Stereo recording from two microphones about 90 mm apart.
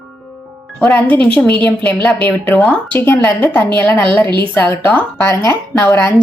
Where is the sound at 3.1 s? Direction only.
30° left (ahead or behind).